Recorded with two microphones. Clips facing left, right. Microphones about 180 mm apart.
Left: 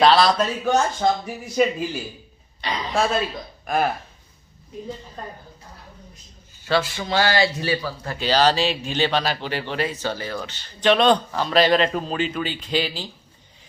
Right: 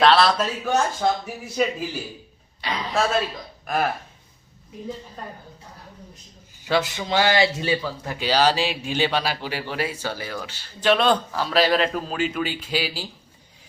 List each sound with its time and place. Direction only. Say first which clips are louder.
0.0 s a man's voice: left 1 dB; centre (ahead or behind)
6.7 s a man's voice: even; 20° right (ahead or behind)